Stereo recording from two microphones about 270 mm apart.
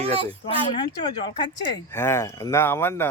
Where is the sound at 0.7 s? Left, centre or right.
Centre.